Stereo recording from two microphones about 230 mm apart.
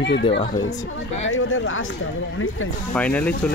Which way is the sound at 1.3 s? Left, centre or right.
Left.